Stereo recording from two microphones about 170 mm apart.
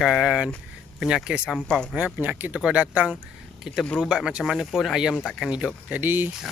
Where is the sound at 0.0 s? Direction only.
5° right (ahead or behind).